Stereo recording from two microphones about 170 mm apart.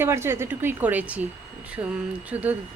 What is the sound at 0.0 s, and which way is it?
A woman's voice, 15° right (ahead or behind).